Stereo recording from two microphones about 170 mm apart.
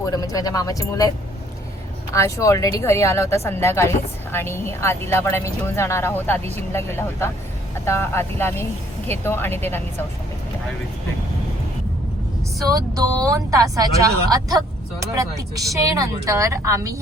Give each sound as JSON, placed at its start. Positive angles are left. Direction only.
{"t": 0.0, "sound": "speech", "side_deg": 20}
{"t": 2.1, "sound": "speech", "side_deg": 20}
{"t": 12.6, "sound": "speech", "side_deg": -20}